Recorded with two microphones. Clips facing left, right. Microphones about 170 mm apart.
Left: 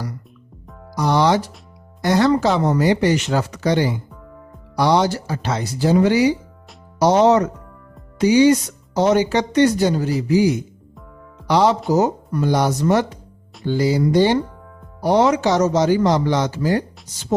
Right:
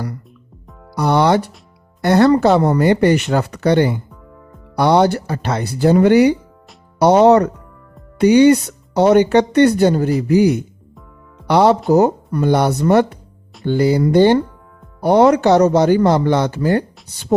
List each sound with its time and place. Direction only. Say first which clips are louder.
0.9 s speech: right 3 dB; 60° right (ahead or behind)